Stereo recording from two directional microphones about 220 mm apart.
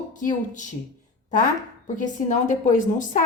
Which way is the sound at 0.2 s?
35° left (ahead or behind).